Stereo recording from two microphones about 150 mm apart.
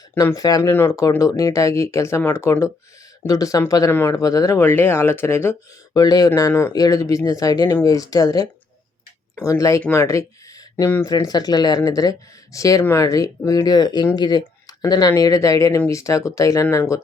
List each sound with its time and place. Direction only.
0.1 s speech: 15° left (ahead or behind)